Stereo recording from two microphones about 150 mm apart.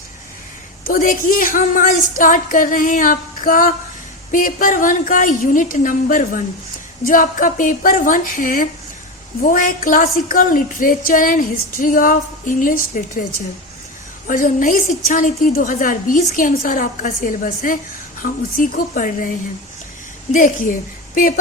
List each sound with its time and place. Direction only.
0.9 s a woman's voice: 75° left (ahead or behind)
20.3 s a woman's voice: 60° left (ahead or behind)